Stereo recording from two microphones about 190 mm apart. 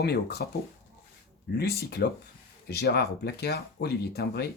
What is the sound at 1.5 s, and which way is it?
Speech, 55° left (ahead or behind).